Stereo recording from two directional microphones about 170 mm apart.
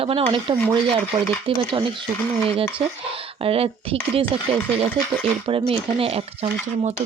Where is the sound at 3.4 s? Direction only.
35° right (ahead or behind).